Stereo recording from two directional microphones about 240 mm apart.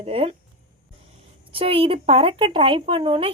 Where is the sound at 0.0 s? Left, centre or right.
Right.